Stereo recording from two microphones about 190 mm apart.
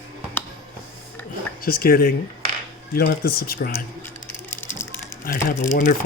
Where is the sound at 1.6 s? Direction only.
50° left (ahead or behind).